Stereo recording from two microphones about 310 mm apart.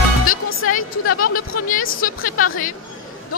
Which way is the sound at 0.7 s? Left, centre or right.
Left.